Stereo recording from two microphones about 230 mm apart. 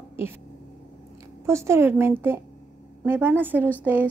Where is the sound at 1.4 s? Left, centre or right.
Centre.